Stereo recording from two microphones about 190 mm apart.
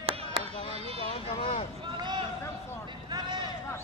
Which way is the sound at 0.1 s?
30° right (ahead or behind).